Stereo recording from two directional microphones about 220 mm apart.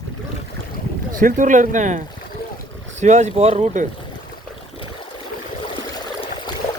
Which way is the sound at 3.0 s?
30° right (ahead or behind).